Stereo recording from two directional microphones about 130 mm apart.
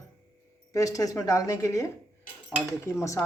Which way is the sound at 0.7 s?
25° left (ahead or behind).